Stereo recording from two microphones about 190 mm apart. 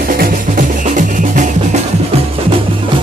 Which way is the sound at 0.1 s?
45° right (ahead or behind).